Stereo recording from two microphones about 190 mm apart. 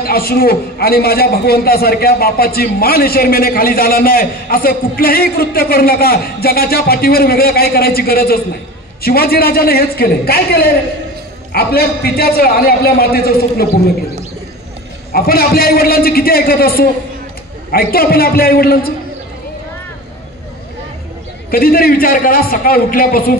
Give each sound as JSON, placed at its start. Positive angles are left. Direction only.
{"t": 0.0, "sound": "a man's voice", "side_deg": 55}
{"t": 15.1, "sound": "a man's voice", "side_deg": 50}
{"t": 21.5, "sound": "a man's voice", "side_deg": 50}